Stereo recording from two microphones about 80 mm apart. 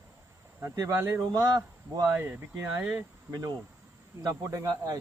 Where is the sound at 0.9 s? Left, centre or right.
Right.